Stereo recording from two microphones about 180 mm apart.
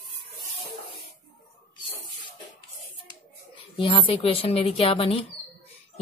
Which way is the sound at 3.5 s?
30° left (ahead or behind).